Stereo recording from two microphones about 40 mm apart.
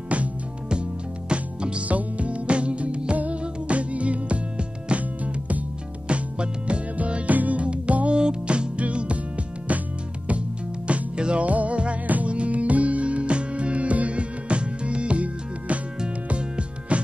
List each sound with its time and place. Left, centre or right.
0.1 s music: right
1.3 s music: right
1.9 s music: right
6.0 s music: right
10.9 s music: right
11.4 s music: right